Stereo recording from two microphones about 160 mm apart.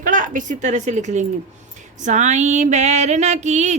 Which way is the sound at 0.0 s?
55° right (ahead or behind).